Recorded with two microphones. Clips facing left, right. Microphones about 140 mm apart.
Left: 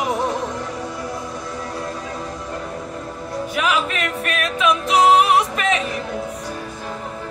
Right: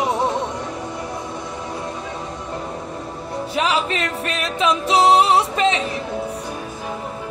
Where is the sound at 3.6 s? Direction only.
30° right (ahead or behind).